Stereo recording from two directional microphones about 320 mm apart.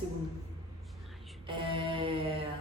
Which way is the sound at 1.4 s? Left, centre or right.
Centre.